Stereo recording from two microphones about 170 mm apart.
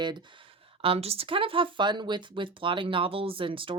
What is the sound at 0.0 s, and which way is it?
Speech, 25° right (ahead or behind).